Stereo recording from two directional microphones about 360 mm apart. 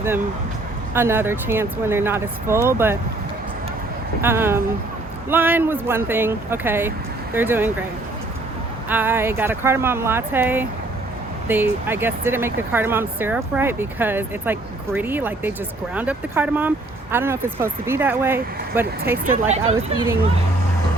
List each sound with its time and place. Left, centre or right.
0.9 s speech: centre
4.2 s speech: centre
8.9 s speech: centre
19.2 s speech: centre